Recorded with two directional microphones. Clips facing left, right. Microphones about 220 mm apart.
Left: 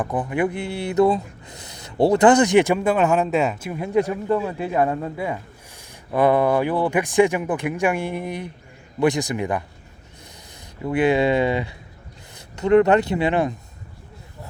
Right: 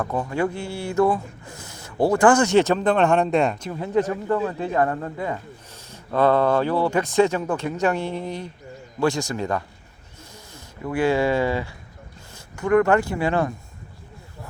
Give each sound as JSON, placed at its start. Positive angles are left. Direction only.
{"t": 0.0, "sound": "speech", "side_deg": 15}
{"t": 3.7, "sound": "speech", "side_deg": 15}